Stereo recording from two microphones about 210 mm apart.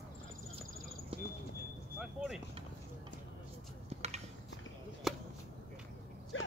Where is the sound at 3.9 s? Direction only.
30° right (ahead or behind).